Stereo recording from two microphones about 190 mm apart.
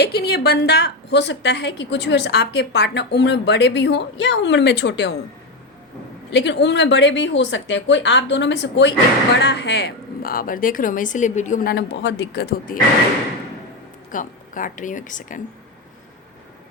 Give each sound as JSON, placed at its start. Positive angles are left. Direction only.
{"t": 0.0, "sound": "a woman's voice", "side_deg": 55}
{"t": 6.3, "sound": "speech", "side_deg": 65}
{"t": 14.1, "sound": "speech", "side_deg": 45}